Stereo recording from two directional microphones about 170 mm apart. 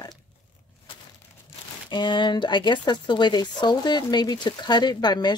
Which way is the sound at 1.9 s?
25° left (ahead or behind).